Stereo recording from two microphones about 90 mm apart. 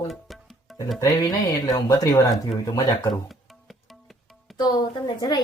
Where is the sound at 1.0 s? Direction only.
40° left (ahead or behind).